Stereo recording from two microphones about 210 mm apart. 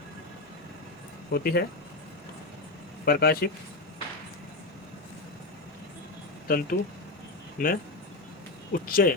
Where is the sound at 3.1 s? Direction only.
50° left (ahead or behind).